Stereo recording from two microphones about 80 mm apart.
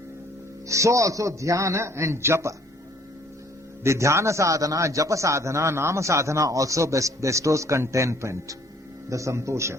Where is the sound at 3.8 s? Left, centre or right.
Right.